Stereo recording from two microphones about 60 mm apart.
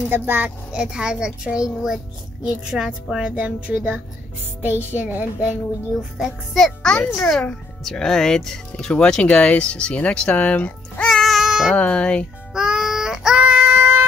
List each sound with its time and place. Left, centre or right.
0.1 s speech: right
0.7 s a child's voice: centre
5.9 s a child's voice: centre
6.8 s a child's voice: centre
8.9 s speech: centre
11.1 s music: centre
11.7 s speech: left
12.5 s child singing: centre
13.5 s child singing: right